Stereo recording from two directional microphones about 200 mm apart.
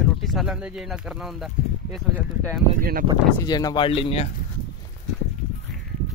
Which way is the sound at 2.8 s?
45° right (ahead or behind).